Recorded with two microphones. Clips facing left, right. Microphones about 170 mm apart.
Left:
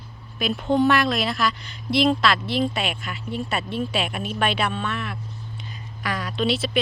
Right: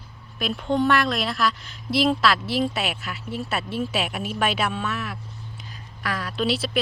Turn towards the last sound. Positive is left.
turn(degrees=-5)  # may be behind; listen again after turning